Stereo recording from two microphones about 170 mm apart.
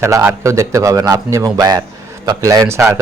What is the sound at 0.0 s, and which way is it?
A man's voice, 15° right (ahead or behind).